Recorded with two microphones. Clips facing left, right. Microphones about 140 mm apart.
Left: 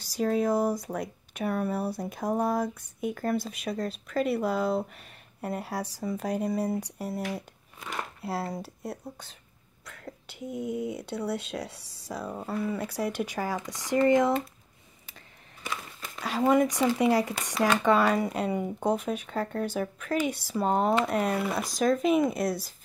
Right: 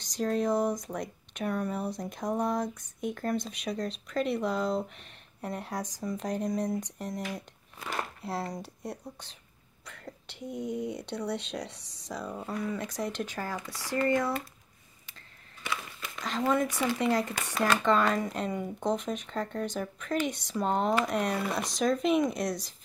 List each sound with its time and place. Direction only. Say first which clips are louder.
0.0 s speech: left 3 dB; 5° left (ahead or behind)
15.6 s a sound: right 1 dB; 40° left (ahead or behind)
16.2 s speech: left 5 dB; 10° left (ahead or behind)